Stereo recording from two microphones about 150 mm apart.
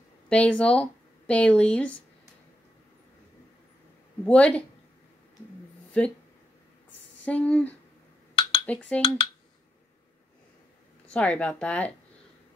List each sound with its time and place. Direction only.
0.3 s speech: 10° left (ahead or behind)
4.2 s speech: 5° left (ahead or behind)
6.0 s speech: 10° left (ahead or behind)
7.2 s speech: 10° left (ahead or behind)
8.4 s a sound: 30° left (ahead or behind)
8.6 s speech: 10° left (ahead or behind)
11.1 s speech: 10° left (ahead or behind)